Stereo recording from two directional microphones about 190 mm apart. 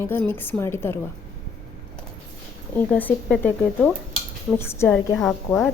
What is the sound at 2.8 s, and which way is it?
Speech, 10° left (ahead or behind).